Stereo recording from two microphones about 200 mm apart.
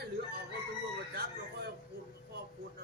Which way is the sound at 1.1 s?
50° right (ahead or behind).